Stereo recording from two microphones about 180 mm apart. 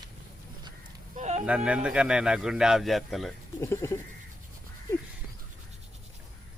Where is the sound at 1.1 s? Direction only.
40° right (ahead or behind).